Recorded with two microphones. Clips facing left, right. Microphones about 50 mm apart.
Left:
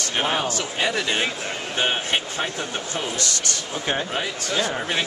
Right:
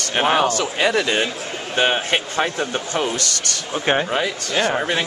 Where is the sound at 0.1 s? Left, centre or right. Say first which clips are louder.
Right 7 dB; right.